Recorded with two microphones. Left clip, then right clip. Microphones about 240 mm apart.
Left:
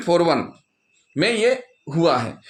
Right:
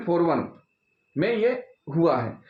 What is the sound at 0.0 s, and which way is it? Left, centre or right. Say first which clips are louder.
Speech: left 5 dB; left.